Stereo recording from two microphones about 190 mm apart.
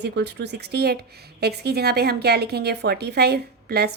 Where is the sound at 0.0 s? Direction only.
60° right (ahead or behind).